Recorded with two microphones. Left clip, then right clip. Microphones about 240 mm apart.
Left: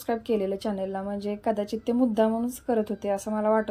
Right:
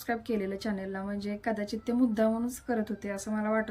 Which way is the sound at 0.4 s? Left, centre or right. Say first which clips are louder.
Left 6 dB; centre.